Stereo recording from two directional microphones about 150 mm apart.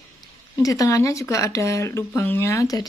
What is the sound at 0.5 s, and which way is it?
Speech, 25° left (ahead or behind).